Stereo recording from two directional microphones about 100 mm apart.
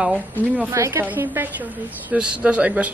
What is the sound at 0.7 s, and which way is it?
A woman's voice, 30° right (ahead or behind).